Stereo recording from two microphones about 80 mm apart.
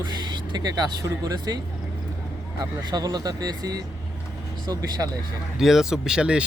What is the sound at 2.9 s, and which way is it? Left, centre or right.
Speech, right.